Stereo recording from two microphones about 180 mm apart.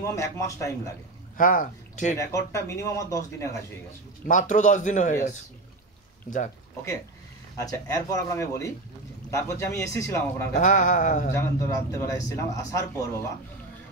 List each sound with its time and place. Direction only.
0.0 s speech: 15° left (ahead or behind)
1.3 s speech: 50° left (ahead or behind)
2.1 s speech: 15° left (ahead or behind)
4.3 s a man's voice: 45° left (ahead or behind)
7.5 s speech: 20° left (ahead or behind)
10.5 s a man's voice: 45° left (ahead or behind)
11.3 s speech: 15° left (ahead or behind)